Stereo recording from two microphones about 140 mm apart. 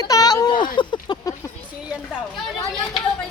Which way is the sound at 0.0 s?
25° left (ahead or behind).